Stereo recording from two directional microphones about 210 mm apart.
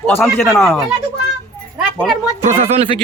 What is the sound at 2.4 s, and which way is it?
Speech, 30° right (ahead or behind).